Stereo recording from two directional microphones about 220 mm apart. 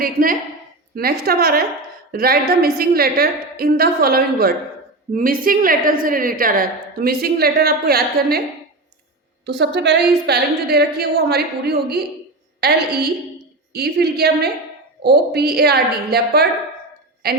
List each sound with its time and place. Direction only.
0.0 s a woman's voice: 40° right (ahead or behind)
9.5 s a woman's voice: 50° right (ahead or behind)